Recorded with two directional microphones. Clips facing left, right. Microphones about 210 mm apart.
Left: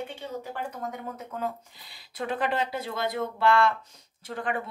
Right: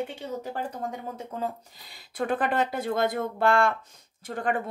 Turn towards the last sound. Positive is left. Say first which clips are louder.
# right 3 dB
turn(degrees=-45)  # may be behind; listen again after turning